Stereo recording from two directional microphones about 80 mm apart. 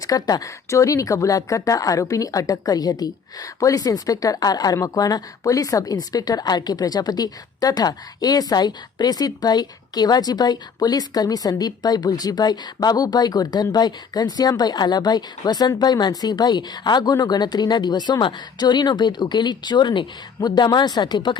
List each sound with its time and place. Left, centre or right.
0.1 s a woman's voice: left